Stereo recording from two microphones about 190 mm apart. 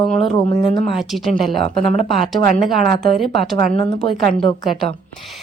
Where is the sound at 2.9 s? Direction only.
55° right (ahead or behind).